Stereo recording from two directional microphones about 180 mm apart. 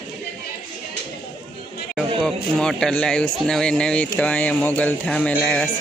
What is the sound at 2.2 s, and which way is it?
Speech, 5° left (ahead or behind).